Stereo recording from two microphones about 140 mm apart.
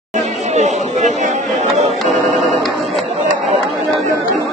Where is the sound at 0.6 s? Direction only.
55° right (ahead or behind).